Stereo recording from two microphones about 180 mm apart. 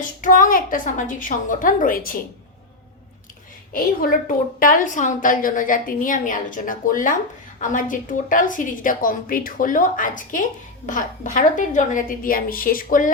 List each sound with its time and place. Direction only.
0.0 s a woman's voice: 50° left (ahead or behind)
3.7 s a woman's voice: 50° left (ahead or behind)